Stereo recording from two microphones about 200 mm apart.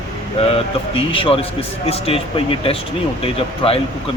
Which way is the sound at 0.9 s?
25° left (ahead or behind).